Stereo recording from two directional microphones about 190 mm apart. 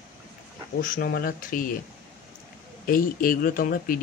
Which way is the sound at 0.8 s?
45° left (ahead or behind).